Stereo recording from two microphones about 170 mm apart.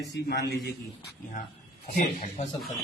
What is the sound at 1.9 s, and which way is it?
Speech, 45° left (ahead or behind).